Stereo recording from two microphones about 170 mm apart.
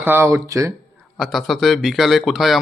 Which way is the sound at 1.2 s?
Centre (ahead or behind).